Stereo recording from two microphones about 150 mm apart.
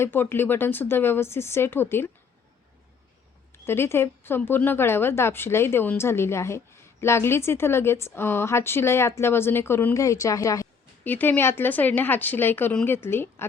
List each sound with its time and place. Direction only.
0.0 s speech: 15° left (ahead or behind)
3.7 s speech: 15° left (ahead or behind)